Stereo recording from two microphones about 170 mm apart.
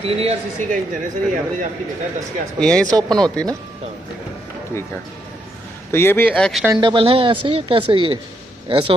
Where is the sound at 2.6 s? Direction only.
5° left (ahead or behind).